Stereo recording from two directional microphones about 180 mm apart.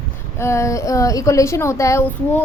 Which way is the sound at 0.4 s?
15° left (ahead or behind).